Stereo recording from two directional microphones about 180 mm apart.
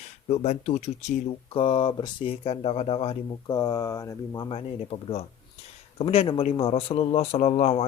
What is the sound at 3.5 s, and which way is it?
Speech, 20° left (ahead or behind).